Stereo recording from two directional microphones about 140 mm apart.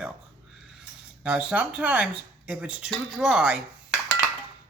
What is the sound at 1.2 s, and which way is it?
Speech, 10° right (ahead or behind).